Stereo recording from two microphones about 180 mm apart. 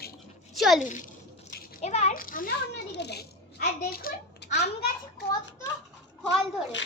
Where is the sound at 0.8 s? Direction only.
45° left (ahead or behind).